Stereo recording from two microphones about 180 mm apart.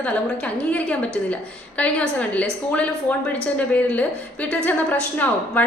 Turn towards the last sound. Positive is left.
turn(degrees=10)  # may be behind; listen again after turning